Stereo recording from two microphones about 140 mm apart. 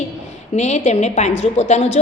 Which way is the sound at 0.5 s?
55° left (ahead or behind).